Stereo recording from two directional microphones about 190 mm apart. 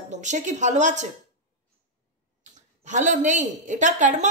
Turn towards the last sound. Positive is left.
turn(degrees=-40)  # may be behind; listen again after turning